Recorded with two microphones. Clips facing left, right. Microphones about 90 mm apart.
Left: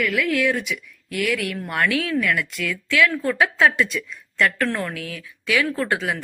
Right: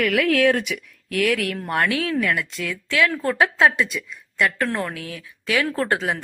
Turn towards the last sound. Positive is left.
turn(degrees=-30)  # may be behind; listen again after turning